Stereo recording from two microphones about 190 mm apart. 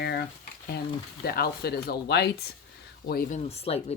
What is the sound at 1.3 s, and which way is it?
Speech, 55° left (ahead or behind).